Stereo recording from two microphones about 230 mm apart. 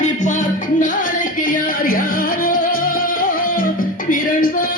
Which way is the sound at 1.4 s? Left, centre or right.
Left.